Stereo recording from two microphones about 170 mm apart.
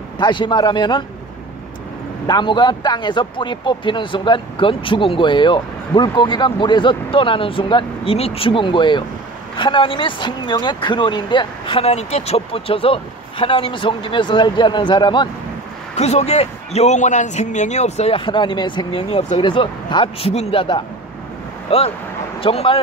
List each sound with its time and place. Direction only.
0.2 s speech: 25° left (ahead or behind)
2.2 s speech: 25° left (ahead or behind)
16.0 s a man's voice: 40° left (ahead or behind)